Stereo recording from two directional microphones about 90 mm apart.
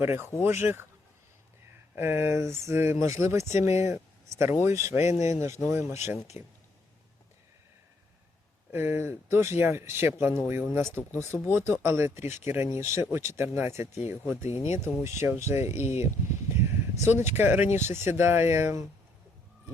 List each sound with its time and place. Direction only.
0.0 s speech: 25° right (ahead or behind)
2.0 s speech: 25° right (ahead or behind)
8.7 s speech: 25° right (ahead or behind)